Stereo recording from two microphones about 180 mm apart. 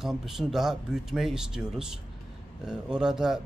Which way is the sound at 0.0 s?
Centre (ahead or behind).